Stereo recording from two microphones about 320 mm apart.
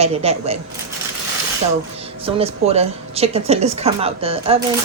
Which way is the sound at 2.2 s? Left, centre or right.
Centre.